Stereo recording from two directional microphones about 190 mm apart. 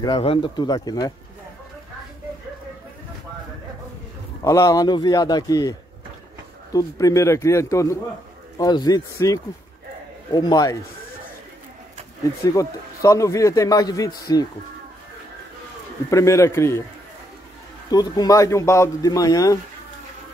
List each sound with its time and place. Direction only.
0.0 s speech: 25° left (ahead or behind)
4.5 s a man's voice: 15° left (ahead or behind)
12.4 s a man's voice: 15° left (ahead or behind)
16.1 s a man's voice: 15° left (ahead or behind)
17.9 s speech: 20° left (ahead or behind)